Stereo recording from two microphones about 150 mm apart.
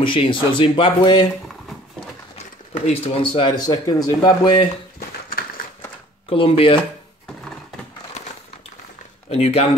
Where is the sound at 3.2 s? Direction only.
35° left (ahead or behind).